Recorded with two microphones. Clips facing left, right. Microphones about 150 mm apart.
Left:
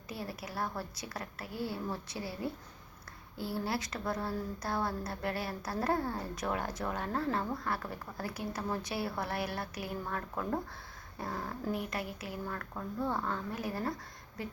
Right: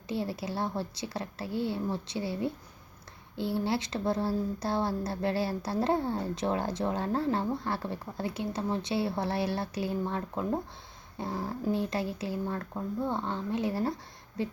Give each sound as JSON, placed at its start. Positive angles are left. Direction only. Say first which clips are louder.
{"t": 0.1, "sound": "speech", "louder": "right 8 dB", "side_deg": -25}